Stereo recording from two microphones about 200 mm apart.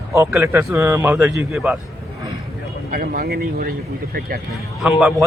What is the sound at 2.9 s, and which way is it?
Speech, 45° right (ahead or behind).